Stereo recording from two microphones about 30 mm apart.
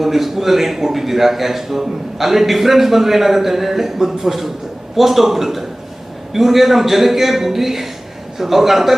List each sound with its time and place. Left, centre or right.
0.0 s a man's voice: centre